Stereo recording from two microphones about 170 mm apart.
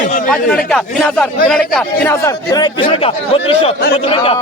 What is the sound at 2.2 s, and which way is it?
Speech, 25° left (ahead or behind).